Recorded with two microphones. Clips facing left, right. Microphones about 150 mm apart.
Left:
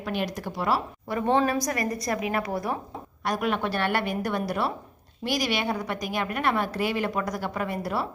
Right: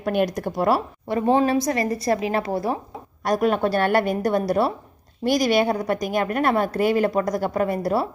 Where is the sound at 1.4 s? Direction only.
25° right (ahead or behind).